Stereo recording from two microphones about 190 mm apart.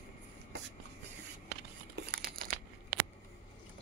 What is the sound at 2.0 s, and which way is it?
Crushing, 55° right (ahead or behind).